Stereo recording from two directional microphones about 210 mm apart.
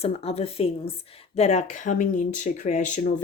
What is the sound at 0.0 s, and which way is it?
Speech, 30° left (ahead or behind).